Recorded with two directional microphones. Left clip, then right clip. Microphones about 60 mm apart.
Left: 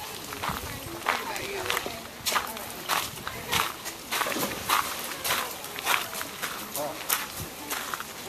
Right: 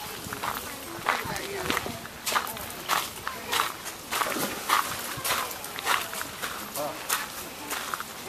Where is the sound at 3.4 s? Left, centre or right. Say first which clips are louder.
Even; centre.